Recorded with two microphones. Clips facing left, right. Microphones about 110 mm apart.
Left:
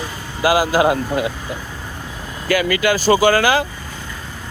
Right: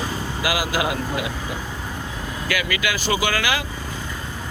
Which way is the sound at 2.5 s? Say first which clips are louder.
Left 9 dB; 40° left (ahead or behind).